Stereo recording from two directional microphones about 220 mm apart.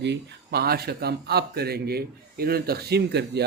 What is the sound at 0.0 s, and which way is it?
A man's voice, 50° right (ahead or behind).